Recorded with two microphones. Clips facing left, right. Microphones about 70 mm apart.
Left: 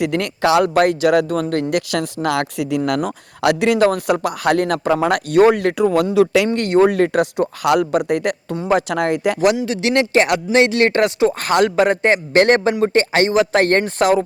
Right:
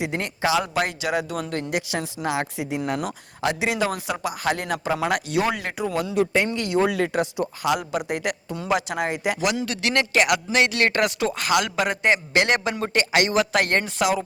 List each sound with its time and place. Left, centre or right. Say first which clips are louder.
0.0 s speech: left 7 dB; left
6.1 s speech: left 4 dB; left
6.5 s speech: left 8 dB; left
8.5 s a man's voice: left 6 dB; left
8.9 s speech: left 7 dB; left
9.6 s a man's voice: left 6 dB; left